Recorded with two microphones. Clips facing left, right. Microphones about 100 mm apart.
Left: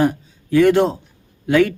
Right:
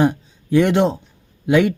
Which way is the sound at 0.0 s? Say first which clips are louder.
Even; 20° right (ahead or behind).